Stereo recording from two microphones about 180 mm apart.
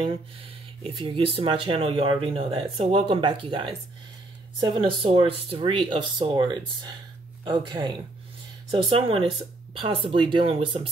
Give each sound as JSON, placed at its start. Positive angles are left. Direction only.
{"t": 0.8, "sound": "speech", "side_deg": -30}